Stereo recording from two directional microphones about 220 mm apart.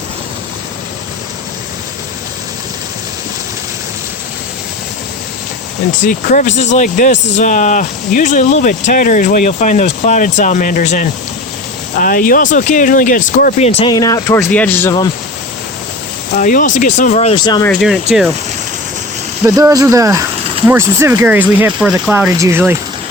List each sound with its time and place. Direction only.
6.1 s speech: 35° left (ahead or behind)
13.9 s speech: 15° left (ahead or behind)
16.4 s speech: 35° left (ahead or behind); by 17.7 s 20° left (ahead or behind)
17.7 s speech: centre (ahead or behind)
19.5 s speech: 15° right (ahead or behind)